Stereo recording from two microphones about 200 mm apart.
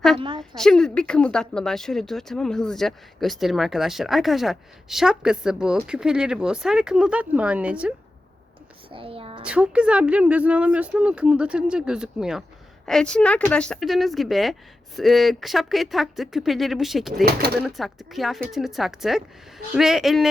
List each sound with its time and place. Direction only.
0.2 s a sound: 25° right (ahead or behind)
0.5 s speech: centre (ahead or behind)
8.9 s a child's voice: 25° right (ahead or behind)
9.4 s speech: 5° right (ahead or behind)
17.2 s speech: 50° right (ahead or behind)
17.6 s speech: centre (ahead or behind)